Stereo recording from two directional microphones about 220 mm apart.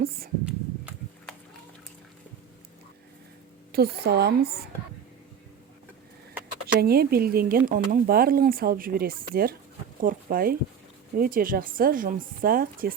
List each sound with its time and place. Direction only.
0.4 s horse: 5° right (ahead or behind)
3.7 s speech: 45° right (ahead or behind)
6.7 s speech: 45° right (ahead or behind)